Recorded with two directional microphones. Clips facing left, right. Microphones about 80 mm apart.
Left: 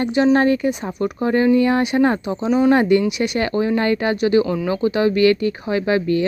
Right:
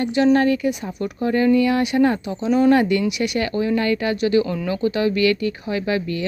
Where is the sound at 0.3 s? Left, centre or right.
Left.